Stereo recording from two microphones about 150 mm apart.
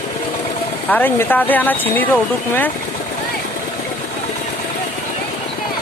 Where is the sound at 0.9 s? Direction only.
10° left (ahead or behind).